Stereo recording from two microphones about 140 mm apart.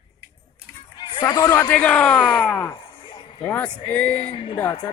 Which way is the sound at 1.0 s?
35° left (ahead or behind).